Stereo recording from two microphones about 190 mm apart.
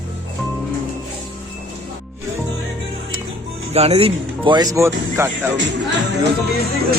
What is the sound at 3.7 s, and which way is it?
Speech, 35° right (ahead or behind).